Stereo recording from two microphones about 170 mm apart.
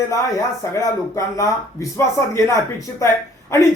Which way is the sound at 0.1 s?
20° left (ahead or behind).